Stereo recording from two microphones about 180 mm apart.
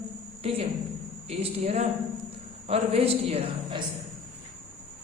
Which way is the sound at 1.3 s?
35° right (ahead or behind).